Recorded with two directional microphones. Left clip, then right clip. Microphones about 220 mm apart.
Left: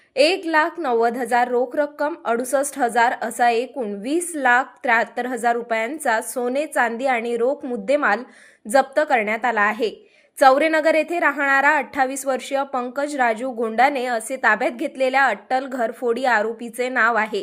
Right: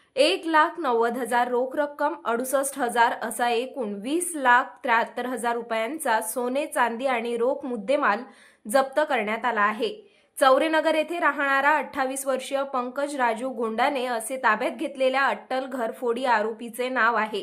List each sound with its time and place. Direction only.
0.2 s a woman's voice: 10° left (ahead or behind)